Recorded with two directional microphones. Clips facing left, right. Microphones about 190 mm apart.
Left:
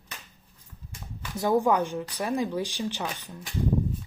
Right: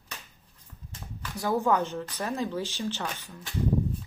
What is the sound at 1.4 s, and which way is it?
Speech, 15° left (ahead or behind).